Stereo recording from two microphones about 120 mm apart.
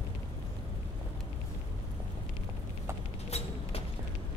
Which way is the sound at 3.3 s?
60° left (ahead or behind).